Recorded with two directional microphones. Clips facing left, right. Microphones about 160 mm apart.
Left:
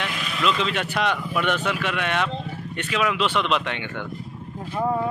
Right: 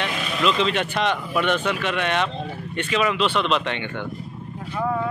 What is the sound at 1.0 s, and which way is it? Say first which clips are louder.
Speech: left 1 dB; 5° left (ahead or behind).